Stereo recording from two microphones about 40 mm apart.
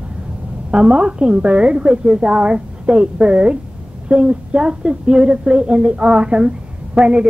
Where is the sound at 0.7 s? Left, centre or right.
Right.